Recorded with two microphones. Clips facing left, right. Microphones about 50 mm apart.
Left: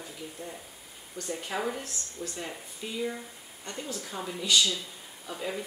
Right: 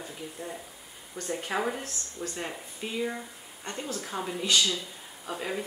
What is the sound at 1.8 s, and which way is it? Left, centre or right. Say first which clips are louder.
Speech: right 2 dB; right.